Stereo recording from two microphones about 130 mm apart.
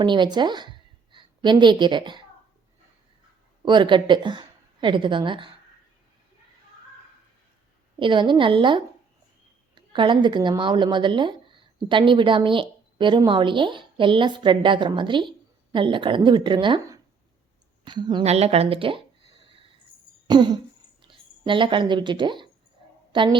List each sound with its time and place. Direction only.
0.0 s a woman's voice: 35° right (ahead or behind)
3.7 s speech: 35° right (ahead or behind)
7.9 s speech: 40° right (ahead or behind)
17.8 s speech: 35° right (ahead or behind)
18.2 s a sound: 55° right (ahead or behind)
20.2 s speech: 35° right (ahead or behind)